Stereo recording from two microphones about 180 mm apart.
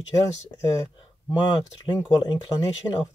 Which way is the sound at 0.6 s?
20° left (ahead or behind).